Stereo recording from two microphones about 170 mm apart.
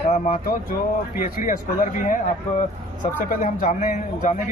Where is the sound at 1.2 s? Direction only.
50° left (ahead or behind).